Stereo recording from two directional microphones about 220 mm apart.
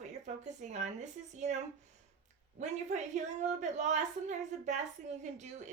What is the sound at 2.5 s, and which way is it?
A woman's voice, 35° right (ahead or behind).